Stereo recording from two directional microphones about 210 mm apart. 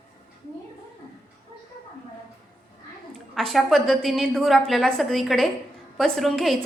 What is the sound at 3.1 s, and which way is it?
A woman's voice, centre (ahead or behind).